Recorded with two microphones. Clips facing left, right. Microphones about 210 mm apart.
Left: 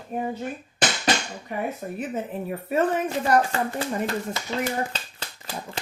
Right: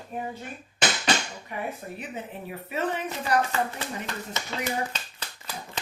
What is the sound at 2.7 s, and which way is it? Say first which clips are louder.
Speech: left 6 dB; 45° left (ahead or behind).